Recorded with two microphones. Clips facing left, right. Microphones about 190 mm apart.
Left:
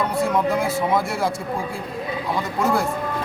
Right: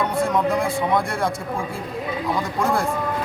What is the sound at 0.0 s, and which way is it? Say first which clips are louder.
Speech: even; centre (ahead or behind).